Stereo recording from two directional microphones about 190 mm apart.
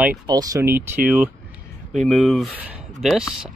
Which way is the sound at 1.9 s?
Centre (ahead or behind).